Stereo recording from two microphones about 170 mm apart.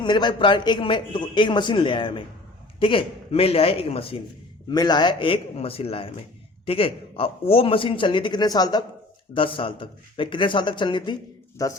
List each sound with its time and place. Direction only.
0.0 s a man's voice: 25° left (ahead or behind)